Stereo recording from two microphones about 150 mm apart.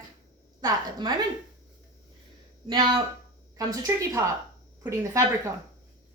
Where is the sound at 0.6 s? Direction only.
30° right (ahead or behind).